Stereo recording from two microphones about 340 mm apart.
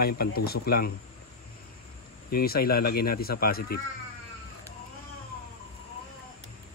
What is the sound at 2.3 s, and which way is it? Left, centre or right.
Speech, left.